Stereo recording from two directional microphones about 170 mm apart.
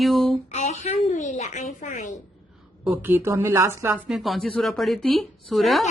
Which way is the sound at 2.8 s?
10° right (ahead or behind).